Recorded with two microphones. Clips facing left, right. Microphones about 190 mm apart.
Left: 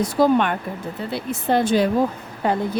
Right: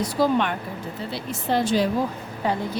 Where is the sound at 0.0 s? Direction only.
50° left (ahead or behind).